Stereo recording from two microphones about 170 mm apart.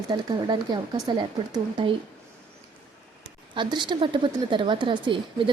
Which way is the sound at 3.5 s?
25° right (ahead or behind).